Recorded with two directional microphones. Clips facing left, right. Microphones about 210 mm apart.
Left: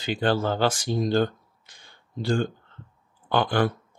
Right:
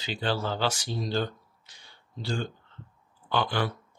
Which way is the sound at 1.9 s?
50° left (ahead or behind).